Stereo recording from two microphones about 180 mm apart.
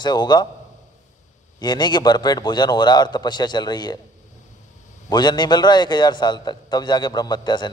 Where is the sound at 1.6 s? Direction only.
25° left (ahead or behind).